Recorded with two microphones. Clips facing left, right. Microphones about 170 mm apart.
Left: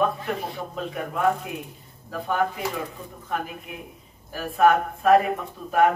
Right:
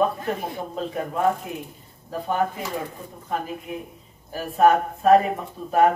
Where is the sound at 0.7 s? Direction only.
30° right (ahead or behind).